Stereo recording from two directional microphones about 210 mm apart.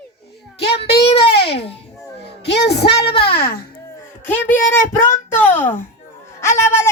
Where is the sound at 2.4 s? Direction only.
55° left (ahead or behind).